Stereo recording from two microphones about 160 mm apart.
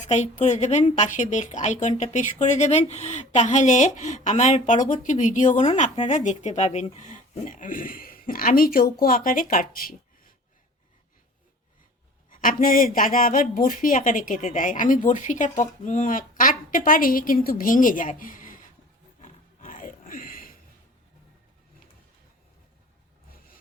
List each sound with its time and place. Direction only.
0.0 s a woman's voice: 45° left (ahead or behind); by 10.3 s 65° left (ahead or behind)
12.3 s speech: 60° left (ahead or behind)
19.6 s a sound: 60° left (ahead or behind)